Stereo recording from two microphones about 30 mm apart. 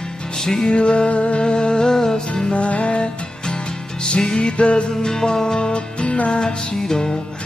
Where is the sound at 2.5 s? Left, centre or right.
Left.